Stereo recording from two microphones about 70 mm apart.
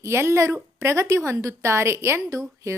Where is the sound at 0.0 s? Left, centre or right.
Right.